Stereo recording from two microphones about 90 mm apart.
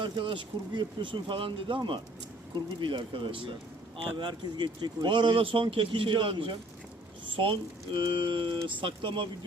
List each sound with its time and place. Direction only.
0.0 s speech: 65° right (ahead or behind)
3.9 s speech: 65° right (ahead or behind)